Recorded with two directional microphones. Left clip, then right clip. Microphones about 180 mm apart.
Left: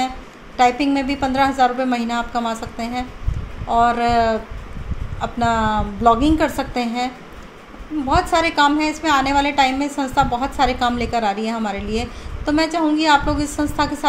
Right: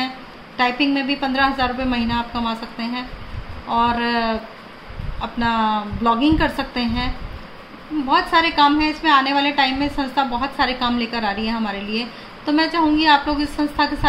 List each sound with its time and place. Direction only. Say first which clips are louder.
0.6 s a woman's voice: left 3 dB; 45° left (ahead or behind)
8.1 s a woman's voice: right 1 dB; 45° left (ahead or behind)